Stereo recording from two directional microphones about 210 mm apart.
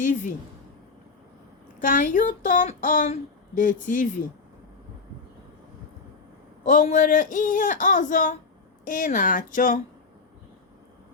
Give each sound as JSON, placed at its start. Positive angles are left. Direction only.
{"t": 0.0, "sound": "speech", "side_deg": 40}
{"t": 1.8, "sound": "speech", "side_deg": 40}
{"t": 6.7, "sound": "speech", "side_deg": 40}